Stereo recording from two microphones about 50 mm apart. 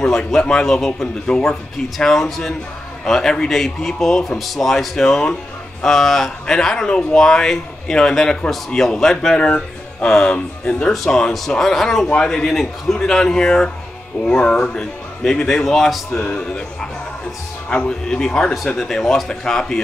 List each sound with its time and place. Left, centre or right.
0.3 s speech: centre
10.0 s speech: centre
10.3 s speech: left; by 12.1 s centre
12.1 s speech: centre
14.8 s speech: centre
16.2 s speech: left
17.8 s speech: centre